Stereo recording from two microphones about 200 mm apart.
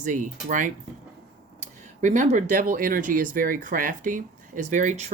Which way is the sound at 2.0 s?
40° right (ahead or behind).